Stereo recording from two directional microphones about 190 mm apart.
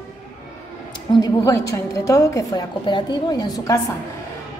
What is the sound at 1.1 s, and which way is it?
A woman's voice, 20° left (ahead or behind).